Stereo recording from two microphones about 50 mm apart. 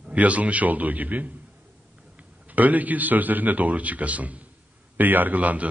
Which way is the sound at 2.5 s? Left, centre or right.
Right.